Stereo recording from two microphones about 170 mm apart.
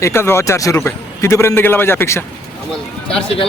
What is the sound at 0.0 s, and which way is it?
A man's voice, 15° left (ahead or behind).